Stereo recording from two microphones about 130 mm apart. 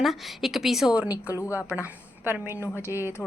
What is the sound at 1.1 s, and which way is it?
Speech, 25° left (ahead or behind).